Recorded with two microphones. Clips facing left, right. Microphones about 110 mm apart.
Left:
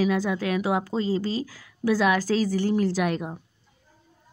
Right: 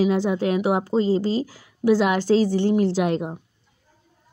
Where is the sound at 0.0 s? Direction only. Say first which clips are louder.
Right 4 dB; 25° right (ahead or behind).